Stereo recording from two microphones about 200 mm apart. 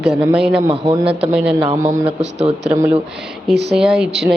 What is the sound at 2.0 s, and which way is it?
Speech, 30° right (ahead or behind).